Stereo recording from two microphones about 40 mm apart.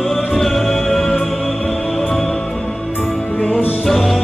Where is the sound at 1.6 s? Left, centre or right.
Centre.